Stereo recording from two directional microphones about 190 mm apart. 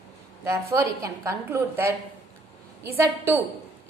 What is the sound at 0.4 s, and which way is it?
A woman's voice, 15° right (ahead or behind).